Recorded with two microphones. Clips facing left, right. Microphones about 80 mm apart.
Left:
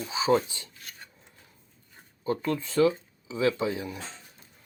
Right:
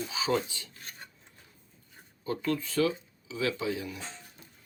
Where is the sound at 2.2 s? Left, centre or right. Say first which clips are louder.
Left 2 dB; left.